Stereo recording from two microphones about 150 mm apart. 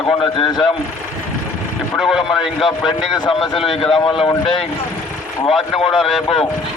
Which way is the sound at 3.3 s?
Centre (ahead or behind).